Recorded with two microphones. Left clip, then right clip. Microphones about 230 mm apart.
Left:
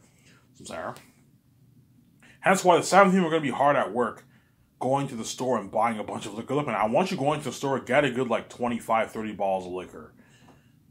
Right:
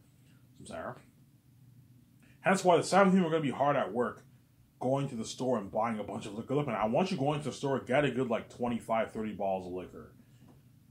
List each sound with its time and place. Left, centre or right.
0.7 s speech: left
2.4 s speech: centre